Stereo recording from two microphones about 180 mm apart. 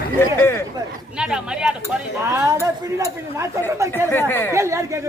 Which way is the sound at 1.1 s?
5° right (ahead or behind).